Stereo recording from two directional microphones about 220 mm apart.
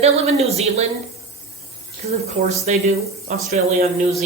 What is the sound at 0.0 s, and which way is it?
Speech, 30° right (ahead or behind).